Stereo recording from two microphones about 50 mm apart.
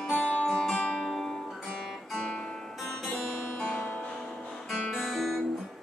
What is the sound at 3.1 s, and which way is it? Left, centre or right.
Music, centre.